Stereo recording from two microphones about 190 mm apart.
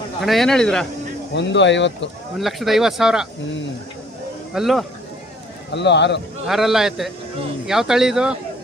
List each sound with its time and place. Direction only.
0.2 s speech: centre (ahead or behind)
1.3 s speech: 70° left (ahead or behind)
2.4 s speech: centre (ahead or behind)
4.5 s speech: centre (ahead or behind)
5.7 s speech: 65° left (ahead or behind)
6.5 s speech: centre (ahead or behind)